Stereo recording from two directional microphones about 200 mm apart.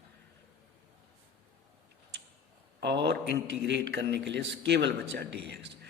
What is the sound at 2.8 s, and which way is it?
A man's voice, 60° right (ahead or behind).